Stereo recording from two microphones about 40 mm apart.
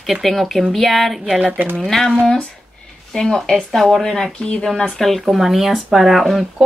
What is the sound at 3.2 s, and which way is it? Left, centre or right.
Speech, centre.